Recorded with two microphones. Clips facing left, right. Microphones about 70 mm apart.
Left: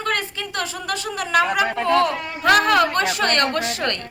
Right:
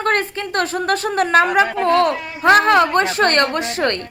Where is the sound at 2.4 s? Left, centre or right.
Right.